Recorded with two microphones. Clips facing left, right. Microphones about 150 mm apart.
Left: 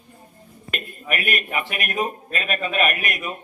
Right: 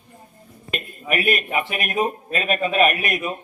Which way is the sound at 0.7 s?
25° right (ahead or behind).